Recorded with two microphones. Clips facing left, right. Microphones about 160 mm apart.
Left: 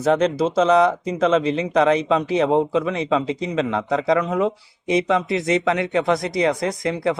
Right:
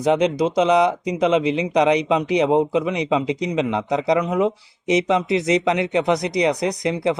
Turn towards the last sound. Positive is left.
turn(degrees=-20)  # may be behind; listen again after turning